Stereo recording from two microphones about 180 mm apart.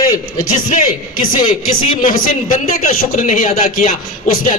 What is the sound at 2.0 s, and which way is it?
Speech, 50° left (ahead or behind).